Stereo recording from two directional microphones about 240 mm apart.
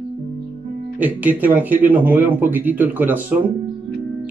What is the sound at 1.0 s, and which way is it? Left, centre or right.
Speech, centre.